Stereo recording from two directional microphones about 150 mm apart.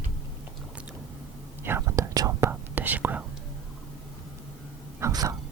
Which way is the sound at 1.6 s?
15° right (ahead or behind).